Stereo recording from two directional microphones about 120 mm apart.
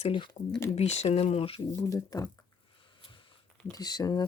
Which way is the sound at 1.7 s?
25° left (ahead or behind).